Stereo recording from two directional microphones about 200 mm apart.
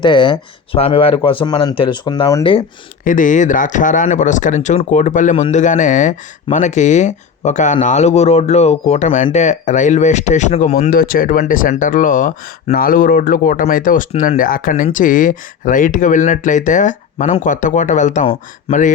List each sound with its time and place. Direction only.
0.0 s speech: 25° left (ahead or behind)
3.0 s speech: 40° left (ahead or behind)